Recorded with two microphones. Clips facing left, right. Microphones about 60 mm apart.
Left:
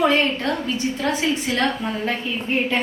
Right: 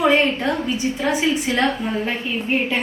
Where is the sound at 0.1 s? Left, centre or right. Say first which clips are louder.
Right 2 dB; centre.